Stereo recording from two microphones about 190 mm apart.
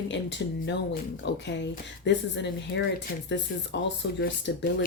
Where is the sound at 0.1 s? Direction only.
65° left (ahead or behind).